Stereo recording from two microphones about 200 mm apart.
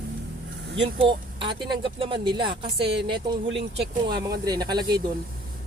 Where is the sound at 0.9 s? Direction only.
25° right (ahead or behind).